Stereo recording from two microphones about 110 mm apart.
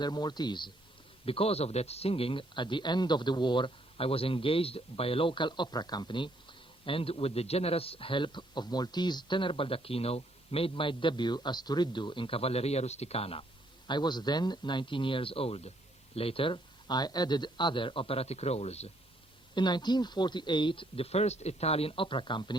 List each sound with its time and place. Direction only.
0.0 s a man's voice: 40° left (ahead or behind)
1.2 s a man's voice: 60° left (ahead or behind)
13.8 s a man's voice: 40° left (ahead or behind); by 18.9 s 70° left (ahead or behind)
19.5 s a man's voice: 40° left (ahead or behind)